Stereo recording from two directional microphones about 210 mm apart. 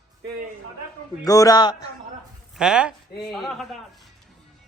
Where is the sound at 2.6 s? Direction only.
5° right (ahead or behind).